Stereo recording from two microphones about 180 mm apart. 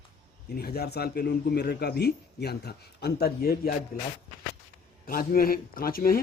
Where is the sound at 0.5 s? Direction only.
60° left (ahead or behind).